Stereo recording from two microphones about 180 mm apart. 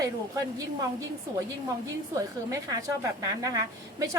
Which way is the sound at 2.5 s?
20° right (ahead or behind).